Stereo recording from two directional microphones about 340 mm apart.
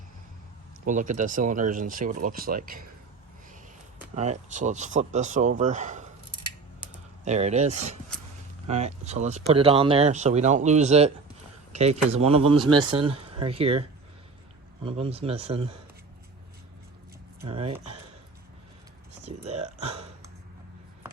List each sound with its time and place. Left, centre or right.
0.9 s speech: right
4.1 s speech: centre
7.3 s speech: centre
14.8 s speech: centre
17.4 s speech: centre
19.2 s speech: centre